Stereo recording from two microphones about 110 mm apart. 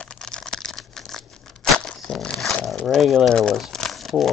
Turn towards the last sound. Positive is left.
turn(degrees=0)  # may be behind; listen again after turning